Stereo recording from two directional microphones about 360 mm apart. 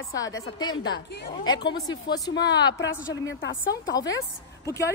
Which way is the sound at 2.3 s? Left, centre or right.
Left.